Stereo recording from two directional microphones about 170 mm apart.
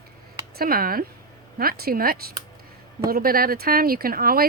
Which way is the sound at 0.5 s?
60° right (ahead or behind).